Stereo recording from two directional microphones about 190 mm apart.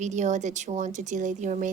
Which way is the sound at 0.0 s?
40° right (ahead or behind).